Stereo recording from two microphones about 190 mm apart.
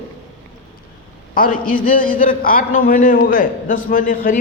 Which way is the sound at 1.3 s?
45° left (ahead or behind).